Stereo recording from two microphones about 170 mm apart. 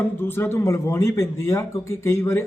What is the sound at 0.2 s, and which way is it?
Speech, 15° left (ahead or behind).